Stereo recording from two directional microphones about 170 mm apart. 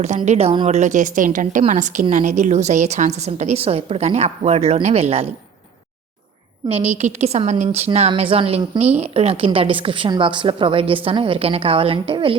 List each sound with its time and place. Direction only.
0.3 s a woman's voice: 35° right (ahead or behind)
6.7 s a woman's voice: 40° right (ahead or behind)